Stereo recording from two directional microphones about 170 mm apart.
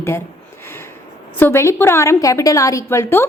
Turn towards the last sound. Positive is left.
turn(degrees=15)  # may be behind; listen again after turning